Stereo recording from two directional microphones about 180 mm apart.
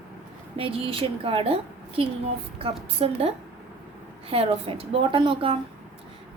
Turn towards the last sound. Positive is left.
turn(degrees=-30)  # may be behind; listen again after turning